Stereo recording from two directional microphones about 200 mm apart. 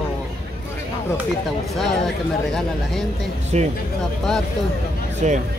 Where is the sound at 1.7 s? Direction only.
Centre (ahead or behind).